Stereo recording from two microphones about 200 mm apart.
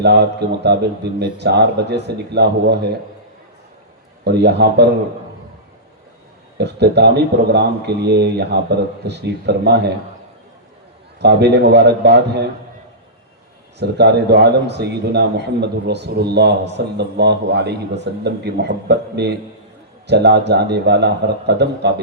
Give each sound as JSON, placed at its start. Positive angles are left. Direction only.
{"t": 0.0, "sound": "a man's voice", "side_deg": -55}
{"t": 4.2, "sound": "a man's voice", "side_deg": -55}
{"t": 6.6, "sound": "a man's voice", "side_deg": -55}
{"t": 11.2, "sound": "a man's voice", "side_deg": -55}
{"t": 13.7, "sound": "a man's voice", "side_deg": -55}